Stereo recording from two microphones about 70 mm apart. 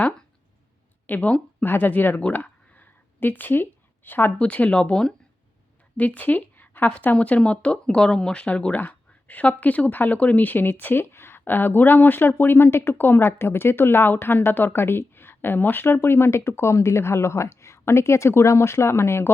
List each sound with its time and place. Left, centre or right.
1.0 s speech: left
2.2 s a sound: left
4.4 s a woman's voice: centre; by 19.3 s left